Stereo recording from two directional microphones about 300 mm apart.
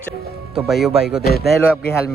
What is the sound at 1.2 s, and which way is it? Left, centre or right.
Speech, left.